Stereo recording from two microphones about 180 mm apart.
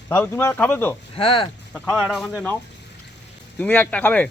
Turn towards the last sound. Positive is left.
turn(degrees=10)  # may be behind; listen again after turning